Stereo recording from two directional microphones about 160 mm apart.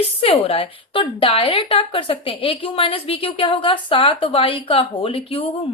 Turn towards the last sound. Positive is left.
turn(degrees=35)  # may be behind; listen again after turning